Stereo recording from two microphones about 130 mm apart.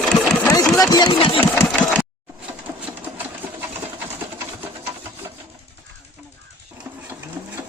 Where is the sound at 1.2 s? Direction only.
45° left (ahead or behind).